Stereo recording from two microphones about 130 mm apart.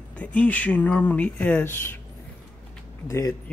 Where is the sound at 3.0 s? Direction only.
25° left (ahead or behind).